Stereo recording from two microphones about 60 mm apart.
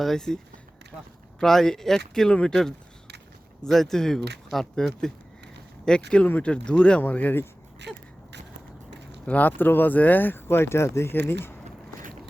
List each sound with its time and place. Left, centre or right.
0.0 s speech: centre
1.4 s speech: centre
7.0 s speech: left
7.9 s speech: centre
9.2 s speech: left